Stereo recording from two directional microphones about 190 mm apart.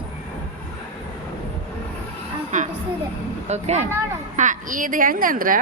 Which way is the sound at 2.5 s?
40° right (ahead or behind).